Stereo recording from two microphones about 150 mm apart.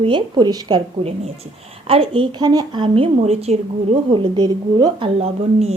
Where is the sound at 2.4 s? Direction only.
25° right (ahead or behind).